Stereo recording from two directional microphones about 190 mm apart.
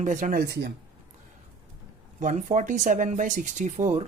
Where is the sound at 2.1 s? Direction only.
40° right (ahead or behind).